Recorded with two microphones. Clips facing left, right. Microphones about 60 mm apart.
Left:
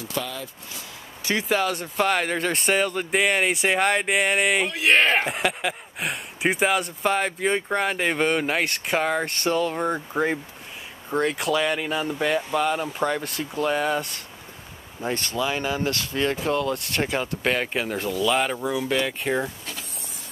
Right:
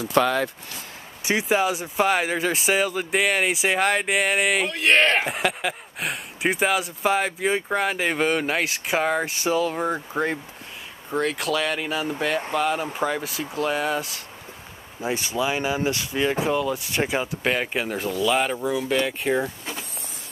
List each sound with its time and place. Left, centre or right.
0.1 s speech: right
1.2 s speech: centre